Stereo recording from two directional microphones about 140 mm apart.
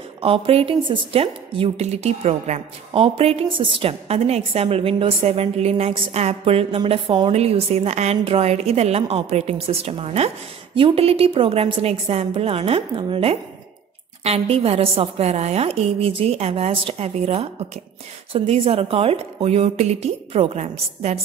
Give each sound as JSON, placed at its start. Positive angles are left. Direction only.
{"t": 0.2, "sound": "a woman's voice", "side_deg": -45}